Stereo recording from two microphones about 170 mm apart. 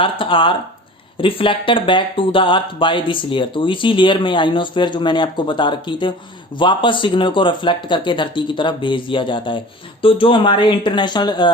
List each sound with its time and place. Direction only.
0.0 s speech: 30° left (ahead or behind)